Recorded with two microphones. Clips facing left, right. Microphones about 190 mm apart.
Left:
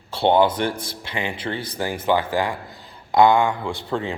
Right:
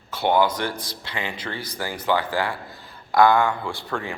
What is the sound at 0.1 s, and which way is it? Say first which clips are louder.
Speech: left 3 dB; 25° left (ahead or behind).